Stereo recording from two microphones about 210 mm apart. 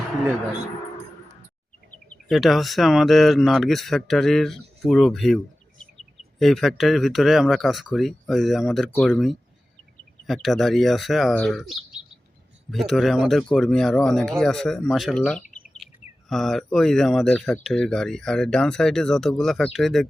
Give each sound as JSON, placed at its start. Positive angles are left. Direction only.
{"t": 2.2, "sound": "speech", "side_deg": 0}
{"t": 6.4, "sound": "speech", "side_deg": 0}